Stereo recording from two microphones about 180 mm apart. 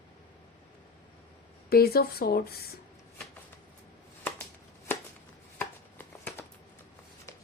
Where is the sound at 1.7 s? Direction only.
60° left (ahead or behind).